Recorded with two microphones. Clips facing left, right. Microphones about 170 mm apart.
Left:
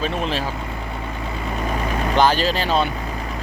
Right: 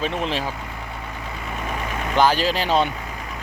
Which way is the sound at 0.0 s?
20° right (ahead or behind).